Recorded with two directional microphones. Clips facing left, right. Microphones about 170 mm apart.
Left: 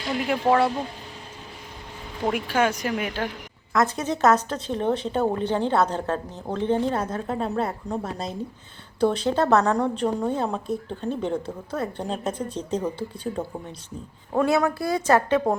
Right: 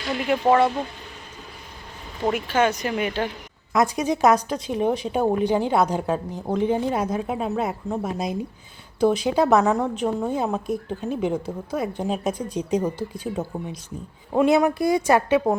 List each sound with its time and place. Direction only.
0.3 s speech: centre (ahead or behind)
2.5 s speech: 10° left (ahead or behind)
3.7 s a woman's voice: 15° right (ahead or behind)